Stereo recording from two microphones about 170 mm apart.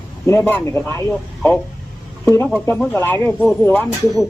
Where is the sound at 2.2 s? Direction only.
15° left (ahead or behind).